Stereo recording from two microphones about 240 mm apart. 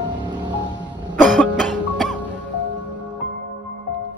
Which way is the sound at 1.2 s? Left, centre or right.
Centre.